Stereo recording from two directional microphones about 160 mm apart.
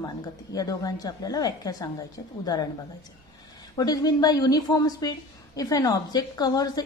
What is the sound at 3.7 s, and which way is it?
A woman's voice, 25° left (ahead or behind).